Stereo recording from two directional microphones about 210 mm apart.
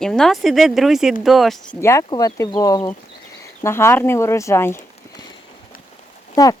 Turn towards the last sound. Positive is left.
turn(degrees=15)  # may be behind; listen again after turning